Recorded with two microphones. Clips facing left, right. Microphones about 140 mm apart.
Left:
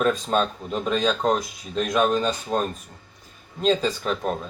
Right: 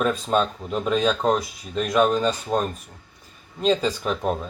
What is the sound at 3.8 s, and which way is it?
Speech, 10° right (ahead or behind).